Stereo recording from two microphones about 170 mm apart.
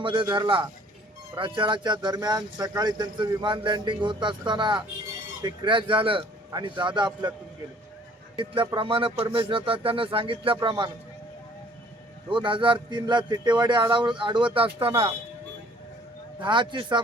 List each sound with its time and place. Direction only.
0.0 s speech: 30° right (ahead or behind)
8.6 s speech: 30° right (ahead or behind)
12.3 s speech: 30° right (ahead or behind)
16.4 s speech: 25° right (ahead or behind)